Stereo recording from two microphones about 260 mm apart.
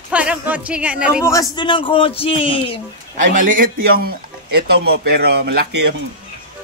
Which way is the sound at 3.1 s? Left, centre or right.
Right.